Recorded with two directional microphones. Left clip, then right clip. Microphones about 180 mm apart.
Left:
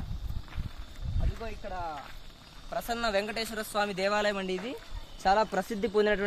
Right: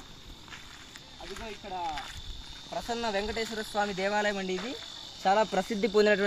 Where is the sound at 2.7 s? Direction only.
Centre (ahead or behind); by 4.7 s 15° right (ahead or behind).